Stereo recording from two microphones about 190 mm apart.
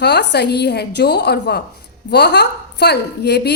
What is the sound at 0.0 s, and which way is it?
A woman's voice, 65° left (ahead or behind).